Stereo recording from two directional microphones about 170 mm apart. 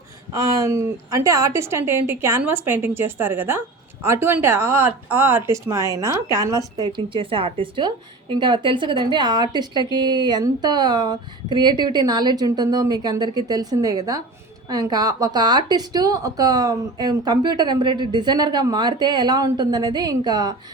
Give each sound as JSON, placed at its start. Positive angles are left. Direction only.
{"t": 0.3, "sound": "a woman's voice", "side_deg": -20}